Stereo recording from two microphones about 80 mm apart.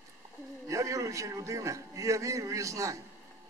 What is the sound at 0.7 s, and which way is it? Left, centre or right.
A man's voice, right.